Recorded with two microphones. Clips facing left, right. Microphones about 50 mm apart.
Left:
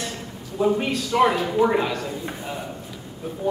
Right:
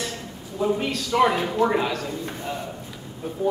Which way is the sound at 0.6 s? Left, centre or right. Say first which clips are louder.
Left 2 dB; centre.